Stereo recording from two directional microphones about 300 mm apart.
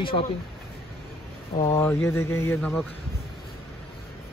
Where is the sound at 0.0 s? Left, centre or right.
Centre.